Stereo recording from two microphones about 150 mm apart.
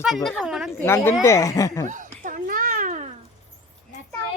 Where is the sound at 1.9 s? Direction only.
60° right (ahead or behind).